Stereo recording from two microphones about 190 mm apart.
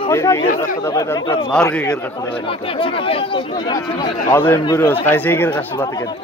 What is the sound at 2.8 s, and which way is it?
Speech, 30° left (ahead or behind).